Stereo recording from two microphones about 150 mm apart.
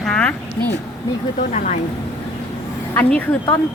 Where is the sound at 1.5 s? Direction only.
50° left (ahead or behind).